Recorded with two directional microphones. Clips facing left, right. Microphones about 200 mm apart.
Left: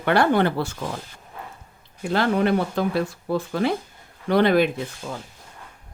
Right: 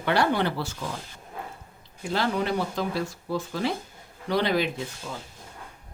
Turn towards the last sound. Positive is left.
turn(degrees=55)  # may be behind; listen again after turning